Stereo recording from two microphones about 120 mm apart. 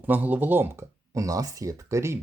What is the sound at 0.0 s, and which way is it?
Speech, 15° right (ahead or behind).